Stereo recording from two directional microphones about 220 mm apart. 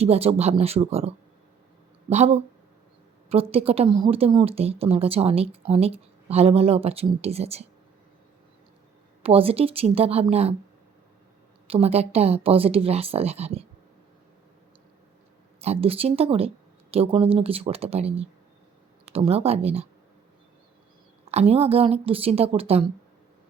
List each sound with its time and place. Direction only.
0.0 s a woman's voice: 25° right (ahead or behind)
9.2 s a woman's voice: 25° right (ahead or behind)
11.7 s a woman's voice: 25° right (ahead or behind)
15.6 s a woman's voice: 25° right (ahead or behind)
21.2 s a woman's voice: 30° right (ahead or behind)